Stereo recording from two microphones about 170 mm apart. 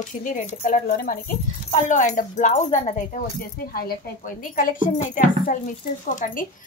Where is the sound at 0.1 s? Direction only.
50° left (ahead or behind).